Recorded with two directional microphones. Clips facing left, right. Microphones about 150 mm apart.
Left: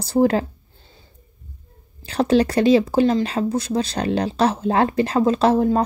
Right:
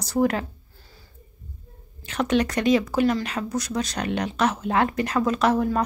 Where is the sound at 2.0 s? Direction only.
30° left (ahead or behind).